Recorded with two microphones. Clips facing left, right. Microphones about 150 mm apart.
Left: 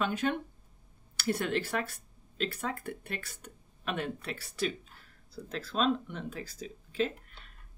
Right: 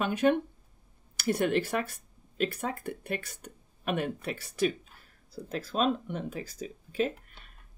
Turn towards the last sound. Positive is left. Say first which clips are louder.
# right 2 dB
turn(degrees=-15)  # may be behind; listen again after turning